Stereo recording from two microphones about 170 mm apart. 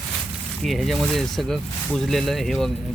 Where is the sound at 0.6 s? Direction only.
Centre (ahead or behind).